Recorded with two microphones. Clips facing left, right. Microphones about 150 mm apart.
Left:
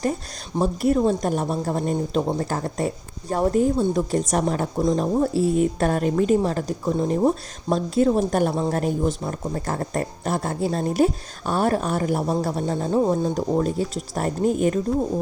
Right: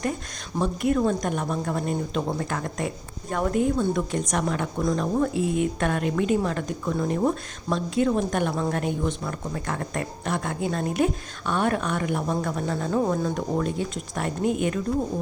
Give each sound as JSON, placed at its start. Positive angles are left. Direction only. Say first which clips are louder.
{"t": 0.6, "sound": "speech", "louder": "left 3 dB", "side_deg": 35}
{"t": 4.8, "sound": "speech", "louder": "left 3 dB", "side_deg": 25}